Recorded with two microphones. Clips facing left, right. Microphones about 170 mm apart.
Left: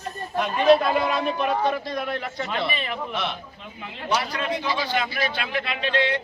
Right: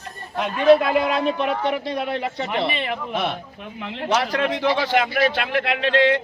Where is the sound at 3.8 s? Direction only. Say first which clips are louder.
Right 4 dB; 85° right.